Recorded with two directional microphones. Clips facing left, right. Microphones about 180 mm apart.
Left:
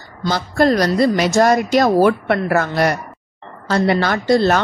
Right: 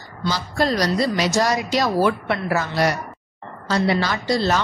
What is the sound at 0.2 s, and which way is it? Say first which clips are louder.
A woman's voice: left 6 dB; 55° left (ahead or behind).